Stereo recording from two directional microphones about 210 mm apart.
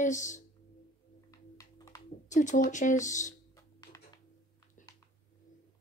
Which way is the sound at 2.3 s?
35° left (ahead or behind).